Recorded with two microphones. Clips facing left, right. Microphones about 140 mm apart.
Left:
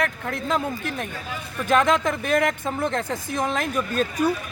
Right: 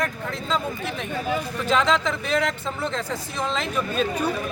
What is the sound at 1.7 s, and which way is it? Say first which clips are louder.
A woman's voice: left 2 dB; 50° left (ahead or behind).